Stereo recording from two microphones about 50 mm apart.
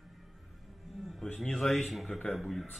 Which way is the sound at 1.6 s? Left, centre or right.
Centre.